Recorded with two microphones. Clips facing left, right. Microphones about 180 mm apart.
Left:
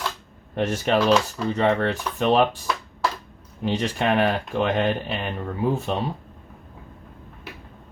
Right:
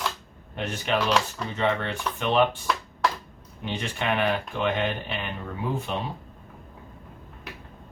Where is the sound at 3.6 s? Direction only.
40° left (ahead or behind).